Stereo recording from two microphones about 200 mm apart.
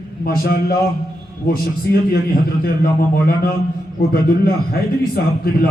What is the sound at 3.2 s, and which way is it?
A man's voice, 50° left (ahead or behind).